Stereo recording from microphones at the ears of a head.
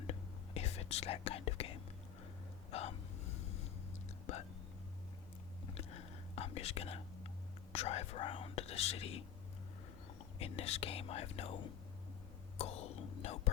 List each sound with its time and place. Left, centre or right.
0.0 s whispering: left
2.6 s gasp: left
5.6 s whispering: left
7.7 s speech: left
10.3 s speech: left
12.5 s whispering: left